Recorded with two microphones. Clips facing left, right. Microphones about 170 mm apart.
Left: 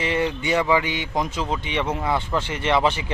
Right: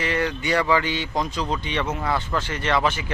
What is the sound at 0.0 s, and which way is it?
Speech, 25° left (ahead or behind).